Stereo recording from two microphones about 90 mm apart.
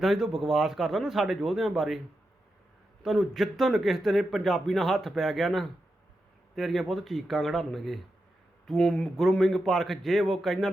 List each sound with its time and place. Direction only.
0.0 s speech: 5° right (ahead or behind)
3.0 s speech: centre (ahead or behind)